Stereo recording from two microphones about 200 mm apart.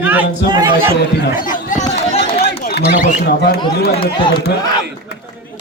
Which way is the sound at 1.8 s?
30° left (ahead or behind).